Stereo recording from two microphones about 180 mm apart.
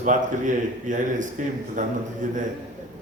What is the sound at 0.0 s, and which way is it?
A man's voice, 45° right (ahead or behind).